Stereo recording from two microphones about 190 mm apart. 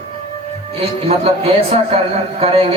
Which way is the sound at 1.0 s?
35° right (ahead or behind).